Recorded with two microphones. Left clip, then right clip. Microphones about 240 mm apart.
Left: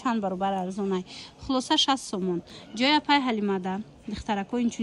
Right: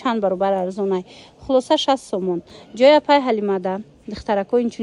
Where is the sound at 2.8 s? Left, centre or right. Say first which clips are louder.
Right 10 dB; centre.